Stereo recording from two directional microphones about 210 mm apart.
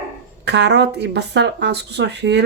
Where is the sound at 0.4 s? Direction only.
55° right (ahead or behind).